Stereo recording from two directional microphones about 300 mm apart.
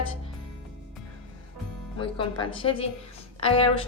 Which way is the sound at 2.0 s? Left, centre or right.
Centre.